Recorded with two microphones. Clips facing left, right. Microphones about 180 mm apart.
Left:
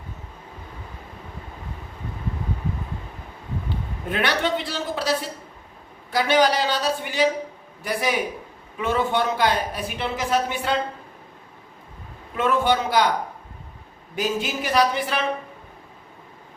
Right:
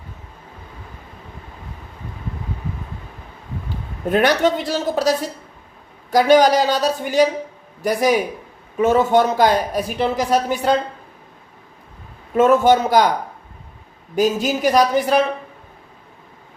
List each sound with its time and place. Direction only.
4.1 s a man's voice: 40° right (ahead or behind)
12.4 s a man's voice: 45° right (ahead or behind)
14.2 s speech: 40° right (ahead or behind)